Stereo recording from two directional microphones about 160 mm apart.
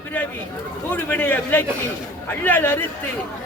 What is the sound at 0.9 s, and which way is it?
Speech, 10° left (ahead or behind).